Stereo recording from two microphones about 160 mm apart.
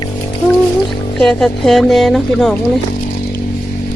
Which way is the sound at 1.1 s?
Centre (ahead or behind).